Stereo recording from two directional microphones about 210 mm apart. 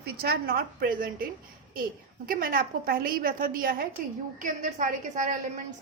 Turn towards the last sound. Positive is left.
turn(degrees=-35)  # may be behind; listen again after turning